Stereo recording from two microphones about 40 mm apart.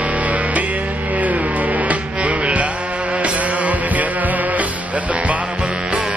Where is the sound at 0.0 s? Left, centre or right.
Right.